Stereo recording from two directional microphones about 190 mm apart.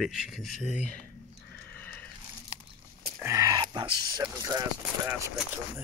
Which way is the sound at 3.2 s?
15° right (ahead or behind).